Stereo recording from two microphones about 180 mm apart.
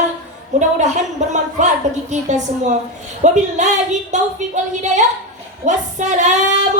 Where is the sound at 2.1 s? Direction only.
40° right (ahead or behind).